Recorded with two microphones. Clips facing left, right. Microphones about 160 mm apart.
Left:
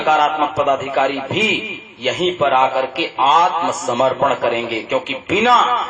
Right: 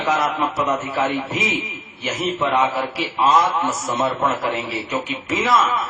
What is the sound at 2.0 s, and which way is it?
Speech, 80° left.